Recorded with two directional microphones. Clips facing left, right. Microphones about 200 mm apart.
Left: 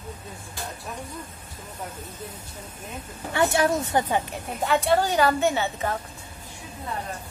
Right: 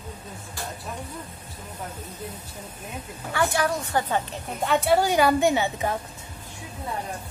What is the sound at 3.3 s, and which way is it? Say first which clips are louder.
A woman's voice: left 3 dB; 25° left (ahead or behind).